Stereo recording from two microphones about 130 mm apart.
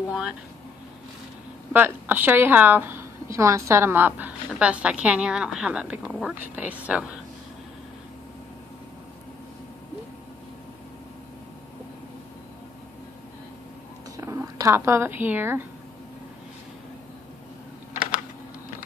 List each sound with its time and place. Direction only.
0.1 s a woman's voice: 5° right (ahead or behind)
1.7 s a woman's voice: 15° right (ahead or behind)
14.1 s speech: 25° right (ahead or behind)